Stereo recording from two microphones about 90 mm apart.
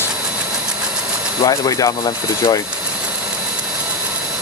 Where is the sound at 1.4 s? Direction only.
40° left (ahead or behind).